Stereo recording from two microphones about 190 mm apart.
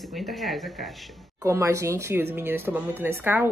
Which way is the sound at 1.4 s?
15° right (ahead or behind).